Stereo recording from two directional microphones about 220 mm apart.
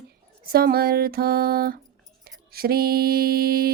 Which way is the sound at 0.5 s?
45° right (ahead or behind).